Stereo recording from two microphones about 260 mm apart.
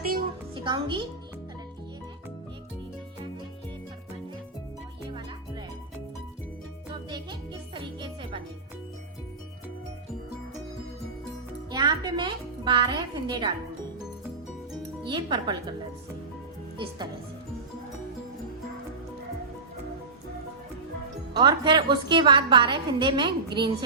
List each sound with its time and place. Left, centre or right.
0.5 s a woman's voice: centre
7.1 s music: centre
11.7 s a child's voice: centre
15.0 s speech: centre
21.3 s a woman's voice: centre